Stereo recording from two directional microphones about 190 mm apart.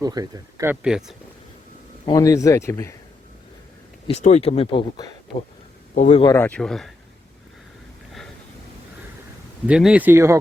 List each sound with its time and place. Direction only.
0.0 s speech: 20° right (ahead or behind); by 1.1 s 5° right (ahead or behind)
2.0 s speech: 15° left (ahead or behind)
4.0 s speech: 35° left (ahead or behind)
5.9 s speech: 40° left (ahead or behind)
6.2 s speech: 10° left (ahead or behind)
9.6 s speech: 5° right (ahead or behind)